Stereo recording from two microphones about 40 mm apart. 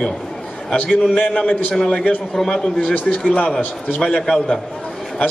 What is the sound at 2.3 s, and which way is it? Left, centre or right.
Speech, centre.